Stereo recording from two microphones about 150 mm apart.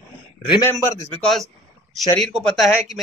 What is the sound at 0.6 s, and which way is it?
Speech, 20° left (ahead or behind).